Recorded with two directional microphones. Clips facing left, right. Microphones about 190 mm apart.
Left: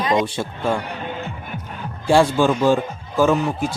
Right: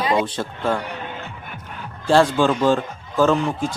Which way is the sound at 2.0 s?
10° left (ahead or behind).